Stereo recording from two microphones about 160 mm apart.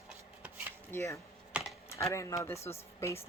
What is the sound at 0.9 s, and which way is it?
Speech, 20° left (ahead or behind).